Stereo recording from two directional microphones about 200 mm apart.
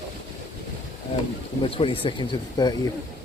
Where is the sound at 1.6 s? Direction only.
25° left (ahead or behind).